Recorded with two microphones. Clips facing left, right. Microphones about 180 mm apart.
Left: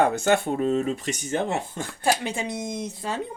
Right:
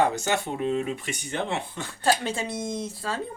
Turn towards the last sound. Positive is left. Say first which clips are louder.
# even
turn(degrees=15)  # may be behind; listen again after turning